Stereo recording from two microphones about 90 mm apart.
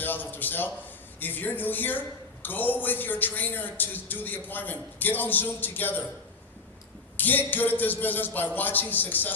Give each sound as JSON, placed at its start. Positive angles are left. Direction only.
{"t": 0.0, "sound": "a man's voice", "side_deg": 20}
{"t": 7.2, "sound": "a man's voice", "side_deg": 20}